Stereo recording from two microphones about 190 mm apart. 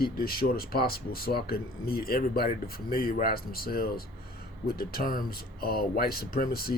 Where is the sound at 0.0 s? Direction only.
50° left (ahead or behind).